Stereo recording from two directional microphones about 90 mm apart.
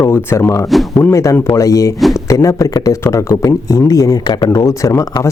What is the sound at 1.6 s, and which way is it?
Speech, 40° left (ahead or behind).